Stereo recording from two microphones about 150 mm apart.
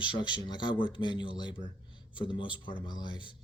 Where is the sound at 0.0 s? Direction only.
30° left (ahead or behind).